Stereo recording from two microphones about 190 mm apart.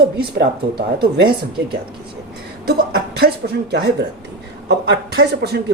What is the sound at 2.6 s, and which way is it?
Speech, 55° right (ahead or behind).